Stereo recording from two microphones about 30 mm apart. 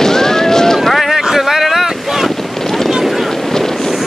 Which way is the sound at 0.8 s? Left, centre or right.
Centre.